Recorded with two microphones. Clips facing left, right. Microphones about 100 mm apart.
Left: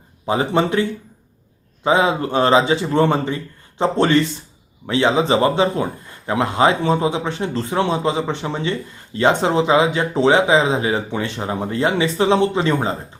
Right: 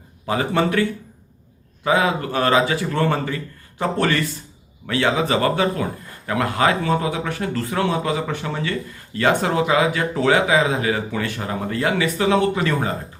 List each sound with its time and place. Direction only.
0.3 s a man's voice: 25° left (ahead or behind)